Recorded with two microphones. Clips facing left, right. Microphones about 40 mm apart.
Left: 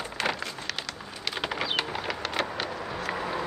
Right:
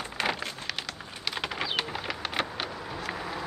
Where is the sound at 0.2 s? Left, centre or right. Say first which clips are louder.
Even; centre.